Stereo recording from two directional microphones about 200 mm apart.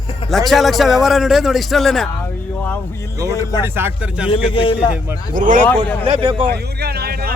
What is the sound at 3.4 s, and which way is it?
Speech, 20° left (ahead or behind).